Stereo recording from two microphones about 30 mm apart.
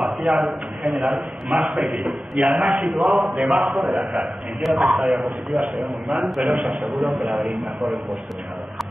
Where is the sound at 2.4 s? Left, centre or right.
Right.